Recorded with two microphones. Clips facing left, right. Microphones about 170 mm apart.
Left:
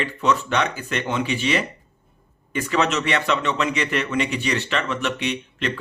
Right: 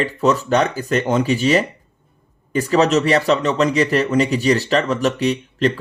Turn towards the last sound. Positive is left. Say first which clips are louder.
# right 8 dB
turn(degrees=-35)  # may be behind; listen again after turning